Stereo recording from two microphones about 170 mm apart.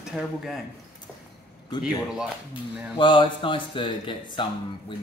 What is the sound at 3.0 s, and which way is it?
Speech, 30° left (ahead or behind).